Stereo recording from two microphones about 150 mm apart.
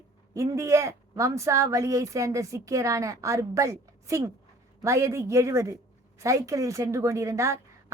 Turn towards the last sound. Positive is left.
turn(degrees=-20)  # may be behind; listen again after turning